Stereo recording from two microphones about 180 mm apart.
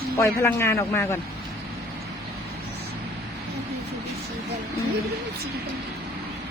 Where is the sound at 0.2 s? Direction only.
15° left (ahead or behind).